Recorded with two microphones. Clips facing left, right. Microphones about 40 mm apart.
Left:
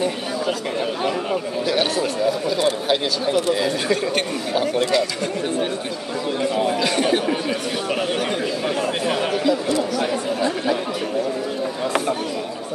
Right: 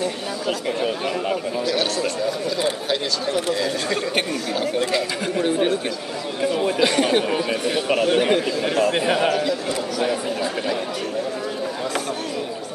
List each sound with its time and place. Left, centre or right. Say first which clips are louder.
0.5 s speech: right 3 dB; centre
4.9 s speech: left 1 dB; right
6.4 s speech: right 1 dB; centre
6.8 s chatter: right 1 dB; centre
8.1 s chatter: right 5 dB; centre
9.0 s a man's voice: right 2 dB; centre
9.3 s a man's voice: left 2 dB; centre